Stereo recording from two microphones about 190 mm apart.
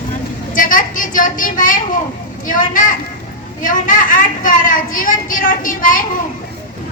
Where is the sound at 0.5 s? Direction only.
45° left (ahead or behind).